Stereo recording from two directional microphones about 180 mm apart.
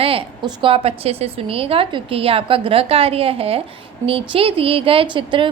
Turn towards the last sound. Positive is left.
turn(degrees=-25)  # may be behind; listen again after turning